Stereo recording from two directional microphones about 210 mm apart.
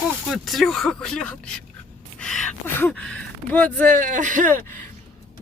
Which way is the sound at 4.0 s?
35° right (ahead or behind).